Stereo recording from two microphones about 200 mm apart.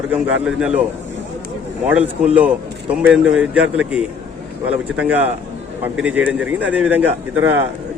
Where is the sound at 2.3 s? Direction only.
5° right (ahead or behind).